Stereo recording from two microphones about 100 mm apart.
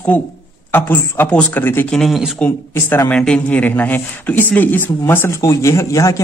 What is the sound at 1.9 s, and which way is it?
Speech, centre (ahead or behind).